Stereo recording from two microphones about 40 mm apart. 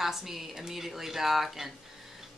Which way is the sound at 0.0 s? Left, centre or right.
Centre.